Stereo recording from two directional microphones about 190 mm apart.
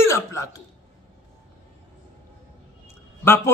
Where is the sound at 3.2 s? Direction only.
10° left (ahead or behind).